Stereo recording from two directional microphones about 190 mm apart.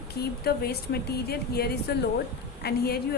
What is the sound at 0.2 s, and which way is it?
A woman's voice, 55° left (ahead or behind).